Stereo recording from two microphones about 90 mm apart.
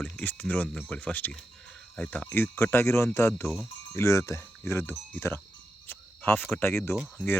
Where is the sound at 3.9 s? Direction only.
30° left (ahead or behind).